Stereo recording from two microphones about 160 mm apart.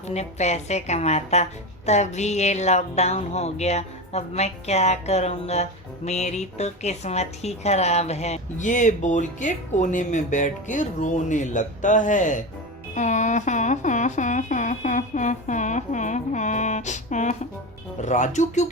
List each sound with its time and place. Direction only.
0.1 s a woman's voice: 45° left (ahead or behind)